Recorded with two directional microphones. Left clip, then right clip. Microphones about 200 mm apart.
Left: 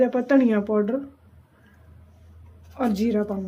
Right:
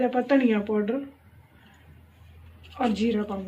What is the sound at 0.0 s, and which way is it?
Speech, 60° left (ahead or behind).